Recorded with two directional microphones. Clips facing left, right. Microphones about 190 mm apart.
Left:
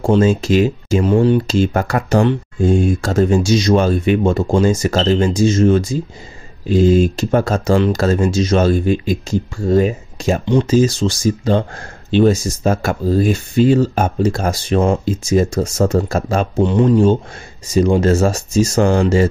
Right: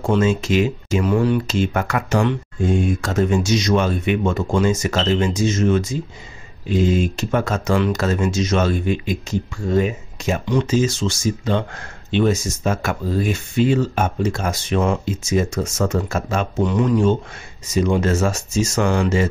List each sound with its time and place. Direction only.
0.0 s speech: 35° left (ahead or behind)